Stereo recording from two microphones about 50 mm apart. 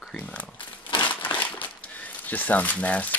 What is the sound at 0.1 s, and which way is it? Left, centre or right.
Crumpling, left.